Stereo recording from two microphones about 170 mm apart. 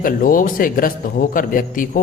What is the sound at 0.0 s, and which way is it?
A man's voice, 55° left (ahead or behind).